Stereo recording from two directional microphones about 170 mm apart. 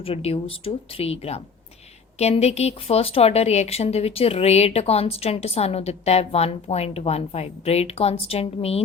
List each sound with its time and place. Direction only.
0.0 s speech: 35° left (ahead or behind)